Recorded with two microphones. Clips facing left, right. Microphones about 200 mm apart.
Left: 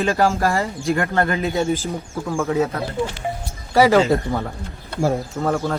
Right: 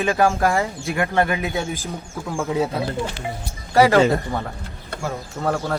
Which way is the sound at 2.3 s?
15° right (ahead or behind).